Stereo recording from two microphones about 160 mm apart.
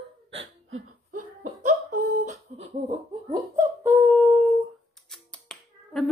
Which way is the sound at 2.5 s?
40° right (ahead or behind).